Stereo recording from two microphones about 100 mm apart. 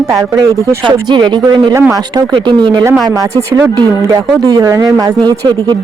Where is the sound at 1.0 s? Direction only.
50° right (ahead or behind).